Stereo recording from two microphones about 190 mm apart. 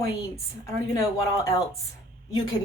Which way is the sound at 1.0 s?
15° left (ahead or behind).